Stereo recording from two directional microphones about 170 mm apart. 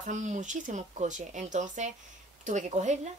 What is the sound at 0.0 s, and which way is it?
Speech, 45° right (ahead or behind).